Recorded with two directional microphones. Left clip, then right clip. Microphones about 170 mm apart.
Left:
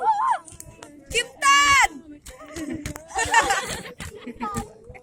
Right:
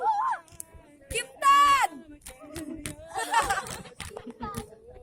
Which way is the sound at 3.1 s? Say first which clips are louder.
Left 6 dB; 50° right (ahead or behind).